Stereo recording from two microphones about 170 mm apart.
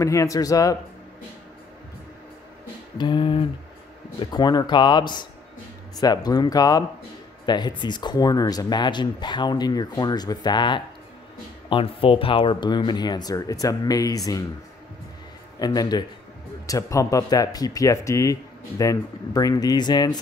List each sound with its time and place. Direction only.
0.0 s speech: 20° left (ahead or behind)
3.0 s a sound: 30° left (ahead or behind)
4.2 s speech: 25° left (ahead or behind)
15.6 s speech: 25° left (ahead or behind)